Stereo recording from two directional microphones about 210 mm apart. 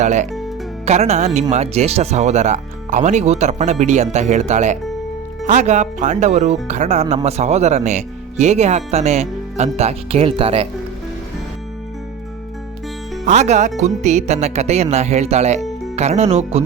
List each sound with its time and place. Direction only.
0.0 s speech: 35° right (ahead or behind)
13.2 s speech: 35° right (ahead or behind)